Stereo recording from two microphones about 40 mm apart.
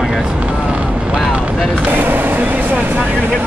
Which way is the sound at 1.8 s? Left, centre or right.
Right.